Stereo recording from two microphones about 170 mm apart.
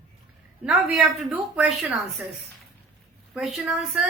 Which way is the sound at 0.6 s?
5° right (ahead or behind).